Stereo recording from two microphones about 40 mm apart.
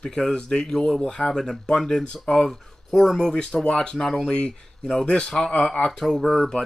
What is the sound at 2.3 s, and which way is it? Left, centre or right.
Speech, centre.